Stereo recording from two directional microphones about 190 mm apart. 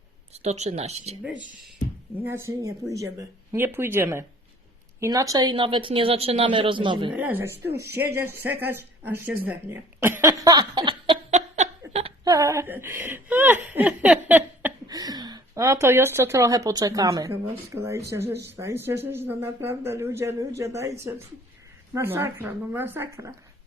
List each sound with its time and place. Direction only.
0.3 s speech: 35° right (ahead or behind)
2.2 s speech: 15° right (ahead or behind)
7.1 s speech: 10° right (ahead or behind); by 11.2 s 25° right (ahead or behind)
11.3 s a sound: 40° right (ahead or behind)
12.2 s speech: 20° right (ahead or behind)
21.9 s speech: 10° right (ahead or behind)